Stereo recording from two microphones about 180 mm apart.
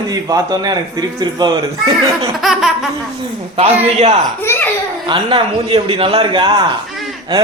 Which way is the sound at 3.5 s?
35° right (ahead or behind).